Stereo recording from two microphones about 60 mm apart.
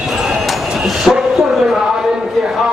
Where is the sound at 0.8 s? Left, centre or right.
Centre.